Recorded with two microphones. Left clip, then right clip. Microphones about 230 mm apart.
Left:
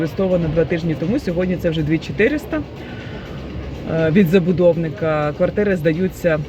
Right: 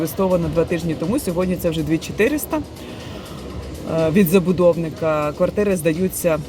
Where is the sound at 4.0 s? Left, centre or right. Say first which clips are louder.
Left 1 dB; centre.